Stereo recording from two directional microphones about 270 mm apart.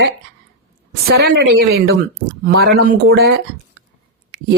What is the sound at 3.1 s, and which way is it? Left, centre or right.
Speech, right.